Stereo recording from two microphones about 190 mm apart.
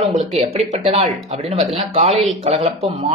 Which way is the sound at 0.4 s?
35° right (ahead or behind).